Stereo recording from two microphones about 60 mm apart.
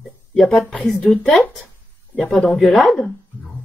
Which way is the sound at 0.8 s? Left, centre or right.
Centre.